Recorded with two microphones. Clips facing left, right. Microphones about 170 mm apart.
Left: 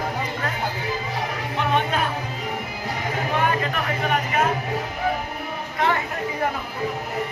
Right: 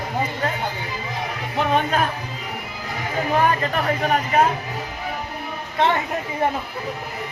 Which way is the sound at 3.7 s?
35° right (ahead or behind).